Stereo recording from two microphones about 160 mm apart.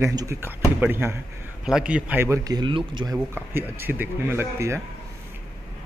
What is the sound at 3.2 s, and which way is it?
Speech, 10° right (ahead or behind).